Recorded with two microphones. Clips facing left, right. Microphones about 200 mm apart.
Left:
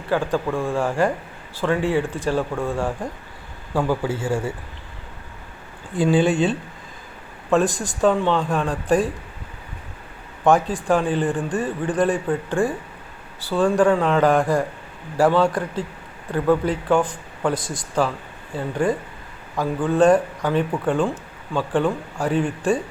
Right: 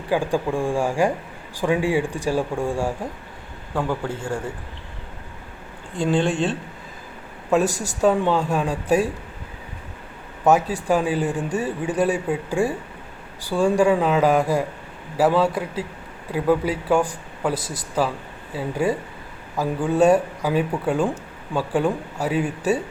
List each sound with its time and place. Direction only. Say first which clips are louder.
0.1 s a man's voice: even; 10° right (ahead or behind)
3.8 s a man's voice: left 3 dB; 5° left (ahead or behind)
6.0 s a man's voice: left 3 dB; 5° left (ahead or behind)
10.4 s a man's voice: even; 10° right (ahead or behind)